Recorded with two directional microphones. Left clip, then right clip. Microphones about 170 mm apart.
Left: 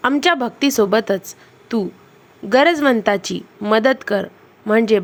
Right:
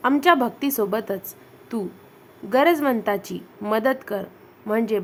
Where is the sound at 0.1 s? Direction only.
20° left (ahead or behind).